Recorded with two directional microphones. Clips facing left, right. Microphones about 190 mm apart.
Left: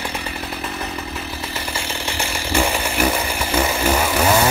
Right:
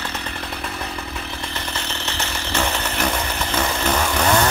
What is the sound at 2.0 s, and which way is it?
Chainsaw, 10° left (ahead or behind).